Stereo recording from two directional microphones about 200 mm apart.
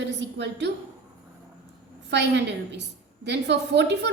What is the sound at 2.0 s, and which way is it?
A woman's voice, 60° right (ahead or behind).